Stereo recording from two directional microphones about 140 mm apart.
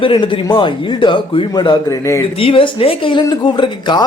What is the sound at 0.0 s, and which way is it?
Speech, 35° left (ahead or behind).